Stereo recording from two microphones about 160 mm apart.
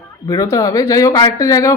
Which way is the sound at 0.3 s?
20° left (ahead or behind).